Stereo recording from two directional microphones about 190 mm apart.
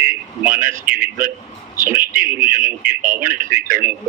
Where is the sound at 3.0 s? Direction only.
45° right (ahead or behind).